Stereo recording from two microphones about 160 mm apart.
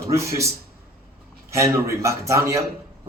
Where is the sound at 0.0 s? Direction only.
20° right (ahead or behind).